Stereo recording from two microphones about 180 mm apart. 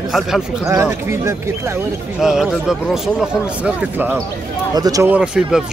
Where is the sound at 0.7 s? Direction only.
15° right (ahead or behind).